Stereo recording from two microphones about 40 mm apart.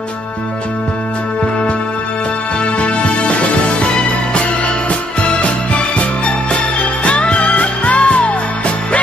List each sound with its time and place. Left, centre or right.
2.6 s music: left